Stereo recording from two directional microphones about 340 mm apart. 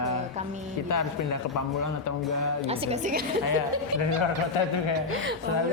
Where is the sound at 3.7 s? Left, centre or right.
Right.